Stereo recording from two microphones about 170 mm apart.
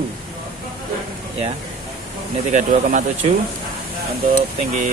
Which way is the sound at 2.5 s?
50° right (ahead or behind).